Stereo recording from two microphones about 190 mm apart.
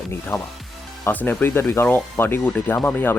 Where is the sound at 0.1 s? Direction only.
10° left (ahead or behind).